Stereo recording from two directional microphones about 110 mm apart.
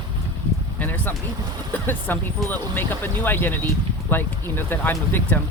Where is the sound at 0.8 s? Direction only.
15° left (ahead or behind).